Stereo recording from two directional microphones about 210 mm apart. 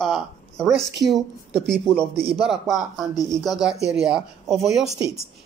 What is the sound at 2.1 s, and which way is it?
Speech, 25° right (ahead or behind).